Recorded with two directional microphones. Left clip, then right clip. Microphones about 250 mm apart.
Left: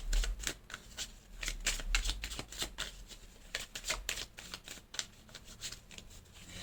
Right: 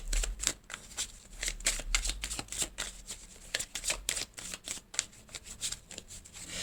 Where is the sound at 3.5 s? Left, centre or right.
Right.